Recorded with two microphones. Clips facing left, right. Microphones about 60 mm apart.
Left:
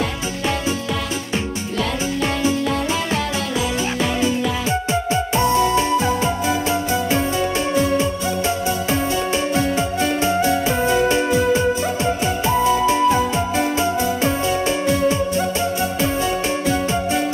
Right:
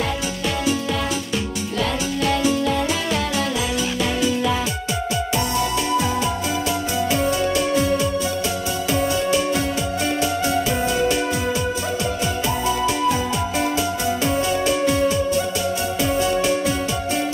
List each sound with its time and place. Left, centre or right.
4.6 s music: left